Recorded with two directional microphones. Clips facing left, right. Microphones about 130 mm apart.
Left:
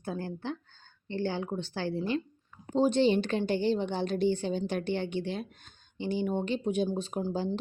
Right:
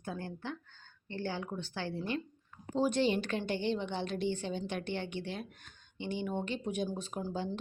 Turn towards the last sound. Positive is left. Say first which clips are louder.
# left 6 dB
turn(degrees=30)  # may be behind; listen again after turning